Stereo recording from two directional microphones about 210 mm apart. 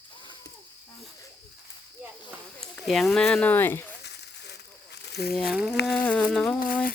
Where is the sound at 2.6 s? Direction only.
Centre (ahead or behind).